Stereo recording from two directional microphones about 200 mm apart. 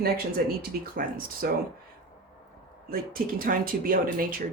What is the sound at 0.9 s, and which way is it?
Speech, 45° right (ahead or behind).